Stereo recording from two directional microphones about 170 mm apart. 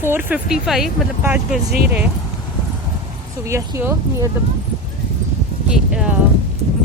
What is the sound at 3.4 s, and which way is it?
Speech, 15° right (ahead or behind).